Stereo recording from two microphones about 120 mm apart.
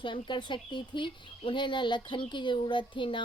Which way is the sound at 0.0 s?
40° left (ahead or behind).